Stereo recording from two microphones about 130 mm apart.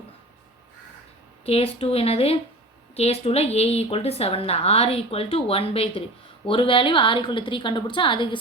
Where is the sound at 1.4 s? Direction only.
50° left (ahead or behind).